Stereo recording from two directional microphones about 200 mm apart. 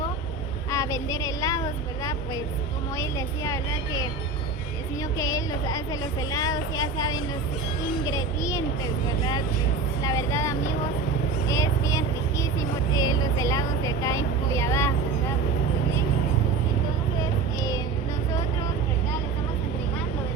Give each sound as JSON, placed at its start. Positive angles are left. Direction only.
{"t": 0.7, "sound": "speech", "side_deg": 15}
{"t": 3.0, "sound": "a woman's voice", "side_deg": 15}
{"t": 5.1, "sound": "a woman's voice", "side_deg": 15}
{"t": 10.0, "sound": "a woman's voice", "side_deg": 15}
{"t": 11.4, "sound": "vehicle", "side_deg": 15}